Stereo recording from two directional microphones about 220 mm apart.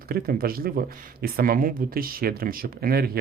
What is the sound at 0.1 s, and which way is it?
Speech, 40° right (ahead or behind).